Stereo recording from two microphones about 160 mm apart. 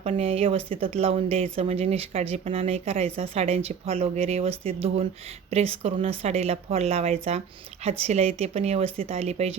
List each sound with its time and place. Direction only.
0.0 s speech: 40° right (ahead or behind)